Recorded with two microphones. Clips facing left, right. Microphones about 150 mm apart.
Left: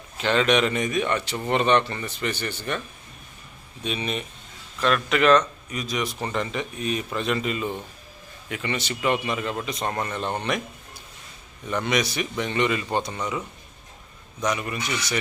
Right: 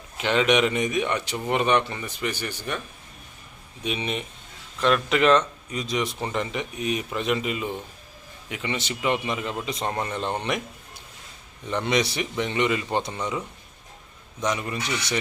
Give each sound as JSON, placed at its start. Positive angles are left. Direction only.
{"t": 0.2, "sound": "speech", "side_deg": -15}
{"t": 3.8, "sound": "a man's voice", "side_deg": -20}
{"t": 11.7, "sound": "a man's voice", "side_deg": -25}
{"t": 14.7, "sound": "a man's voice", "side_deg": -25}